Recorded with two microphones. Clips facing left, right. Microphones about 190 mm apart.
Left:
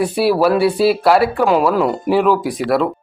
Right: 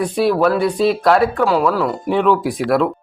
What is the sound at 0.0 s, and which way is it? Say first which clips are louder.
Speech: left 1 dB; 5° left (ahead or behind).